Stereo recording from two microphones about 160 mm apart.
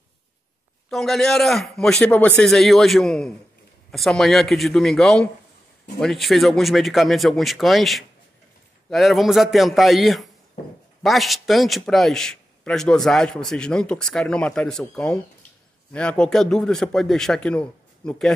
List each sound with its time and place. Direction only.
0.8 s a man's voice: centre (ahead or behind)